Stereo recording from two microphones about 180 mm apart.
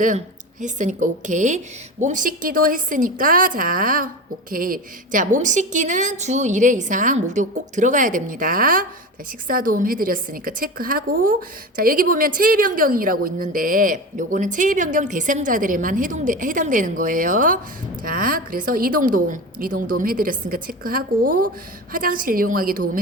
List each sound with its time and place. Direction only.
0.6 s a woman's voice: 45° right (ahead or behind)